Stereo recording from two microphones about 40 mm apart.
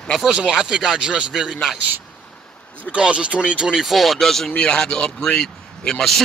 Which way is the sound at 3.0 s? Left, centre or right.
Right.